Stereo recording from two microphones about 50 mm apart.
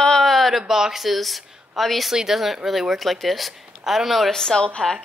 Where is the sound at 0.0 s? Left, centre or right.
Centre.